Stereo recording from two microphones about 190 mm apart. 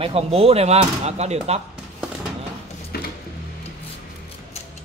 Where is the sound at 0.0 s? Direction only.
30° right (ahead or behind).